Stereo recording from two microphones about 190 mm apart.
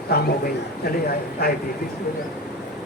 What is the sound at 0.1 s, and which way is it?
Speech, 55° left (ahead or behind).